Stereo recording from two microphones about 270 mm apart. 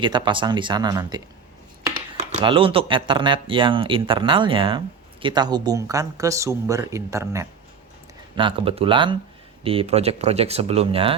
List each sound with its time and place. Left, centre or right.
0.0 s speech: centre